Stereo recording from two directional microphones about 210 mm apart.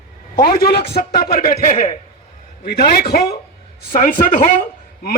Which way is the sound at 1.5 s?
35° left (ahead or behind).